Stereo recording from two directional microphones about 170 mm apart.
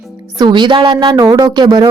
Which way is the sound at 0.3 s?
25° right (ahead or behind).